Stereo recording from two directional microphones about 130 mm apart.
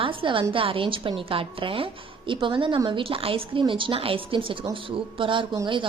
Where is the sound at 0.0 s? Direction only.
40° right (ahead or behind).